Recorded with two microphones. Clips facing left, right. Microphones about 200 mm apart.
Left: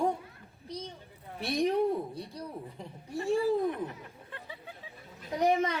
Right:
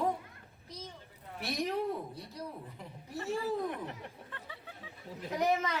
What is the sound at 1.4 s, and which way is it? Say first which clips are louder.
Speech: left 6 dB; 30° left (ahead or behind).